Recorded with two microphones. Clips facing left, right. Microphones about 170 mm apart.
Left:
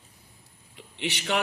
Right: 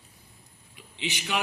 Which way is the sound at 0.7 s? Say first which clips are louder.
Left 2 dB; 65° left (ahead or behind).